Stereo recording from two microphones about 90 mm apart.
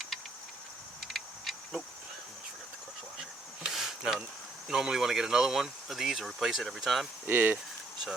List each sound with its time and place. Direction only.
1.0 s a sound: centre (ahead or behind)
3.2 s insect: 5° right (ahead or behind)
4.7 s speech: 5° right (ahead or behind)
7.3 s speech: 20° right (ahead or behind)